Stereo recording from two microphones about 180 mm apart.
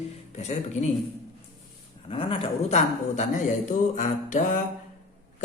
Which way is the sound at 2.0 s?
30° left (ahead or behind).